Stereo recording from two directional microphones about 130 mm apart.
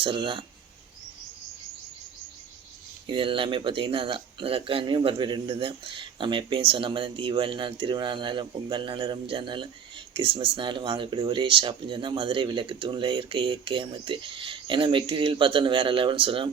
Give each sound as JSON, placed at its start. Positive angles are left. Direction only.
{"t": 0.0, "sound": "speech", "side_deg": -40}
{"t": 3.1, "sound": "speech", "side_deg": -40}